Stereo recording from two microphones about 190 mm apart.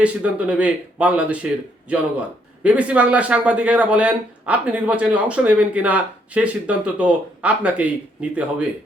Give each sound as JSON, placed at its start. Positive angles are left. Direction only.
{"t": 0.0, "sound": "a man's voice", "side_deg": -5}